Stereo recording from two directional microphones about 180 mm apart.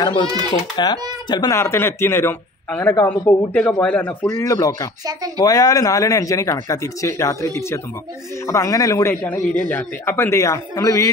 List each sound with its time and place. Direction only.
0.0 s a man's voice: 30° left (ahead or behind)